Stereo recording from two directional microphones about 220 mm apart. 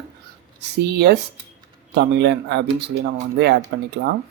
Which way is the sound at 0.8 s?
50° right (ahead or behind).